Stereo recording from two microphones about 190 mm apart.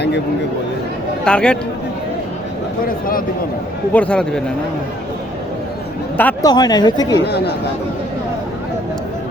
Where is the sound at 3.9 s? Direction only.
5° left (ahead or behind).